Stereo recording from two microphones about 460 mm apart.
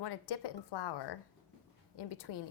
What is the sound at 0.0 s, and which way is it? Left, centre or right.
A woman's voice, left.